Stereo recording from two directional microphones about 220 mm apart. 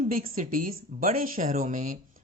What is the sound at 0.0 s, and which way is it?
A woman's voice, 40° right (ahead or behind).